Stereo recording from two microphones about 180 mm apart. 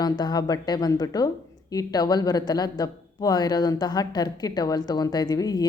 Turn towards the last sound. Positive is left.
turn(degrees=20)  # may be behind; listen again after turning